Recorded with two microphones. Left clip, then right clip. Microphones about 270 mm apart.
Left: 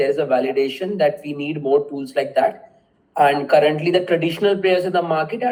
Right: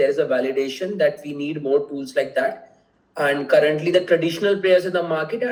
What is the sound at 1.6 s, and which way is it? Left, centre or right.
Speech, centre.